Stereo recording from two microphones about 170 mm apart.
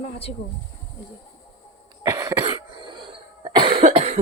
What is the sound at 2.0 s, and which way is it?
Cough, 20° right (ahead or behind).